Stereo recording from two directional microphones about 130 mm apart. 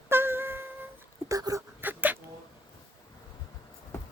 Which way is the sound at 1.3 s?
25° right (ahead or behind).